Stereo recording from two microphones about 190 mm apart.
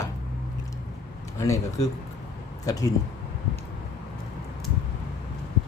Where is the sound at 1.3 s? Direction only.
15° left (ahead or behind).